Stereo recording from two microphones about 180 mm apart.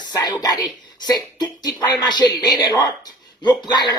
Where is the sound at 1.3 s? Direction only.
25° left (ahead or behind).